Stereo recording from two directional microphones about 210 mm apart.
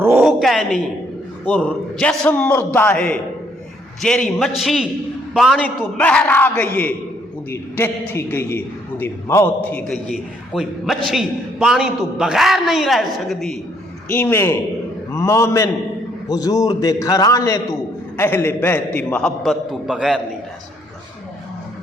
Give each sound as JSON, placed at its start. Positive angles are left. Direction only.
{"t": 0.0, "sound": "a sound", "side_deg": -10}
{"t": 1.5, "sound": "a man's voice", "side_deg": 5}
{"t": 14.1, "sound": "a man's voice", "side_deg": 10}